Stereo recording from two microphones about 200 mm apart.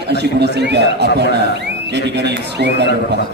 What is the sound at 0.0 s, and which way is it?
A man's voice, 55° right (ahead or behind).